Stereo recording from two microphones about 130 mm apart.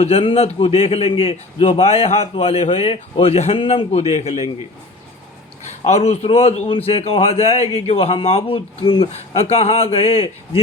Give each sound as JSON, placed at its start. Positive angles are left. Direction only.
{"t": 0.0, "sound": "a man's voice", "side_deg": 50}
{"t": 5.8, "sound": "a man's voice", "side_deg": 55}